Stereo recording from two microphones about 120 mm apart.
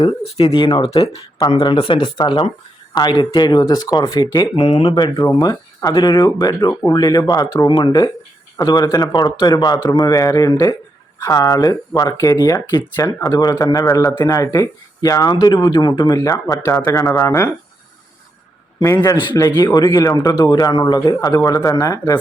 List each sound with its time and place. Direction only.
0.0 s speech: 50° left (ahead or behind)
1.4 s a man's voice: 45° left (ahead or behind)
4.9 s a man's voice: 35° left (ahead or behind)
5.9 s a man's voice: 45° left (ahead or behind); by 17.5 s 20° left (ahead or behind)
19.3 s a man's voice: 30° left (ahead or behind)